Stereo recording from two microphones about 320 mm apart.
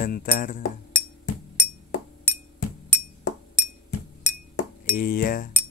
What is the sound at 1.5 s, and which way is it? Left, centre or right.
Glass, left.